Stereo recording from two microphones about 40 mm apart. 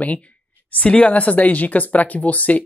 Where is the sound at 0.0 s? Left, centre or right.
Left.